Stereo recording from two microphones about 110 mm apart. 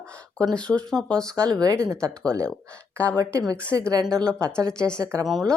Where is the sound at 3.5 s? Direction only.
30° right (ahead or behind).